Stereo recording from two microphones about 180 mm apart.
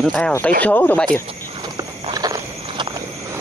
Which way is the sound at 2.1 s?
20° right (ahead or behind).